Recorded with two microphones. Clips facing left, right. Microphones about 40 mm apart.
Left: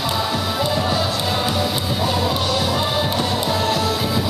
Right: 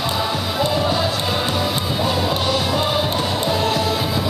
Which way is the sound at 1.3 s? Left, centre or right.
Centre.